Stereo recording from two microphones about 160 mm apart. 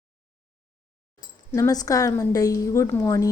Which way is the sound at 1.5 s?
25° left (ahead or behind).